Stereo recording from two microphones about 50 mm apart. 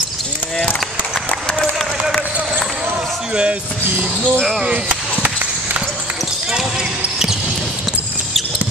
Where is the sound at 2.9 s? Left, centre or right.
Centre.